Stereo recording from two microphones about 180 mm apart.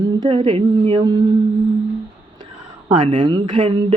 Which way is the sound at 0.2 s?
25° right (ahead or behind).